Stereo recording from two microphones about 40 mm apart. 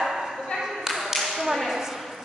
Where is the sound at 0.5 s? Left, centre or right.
Centre.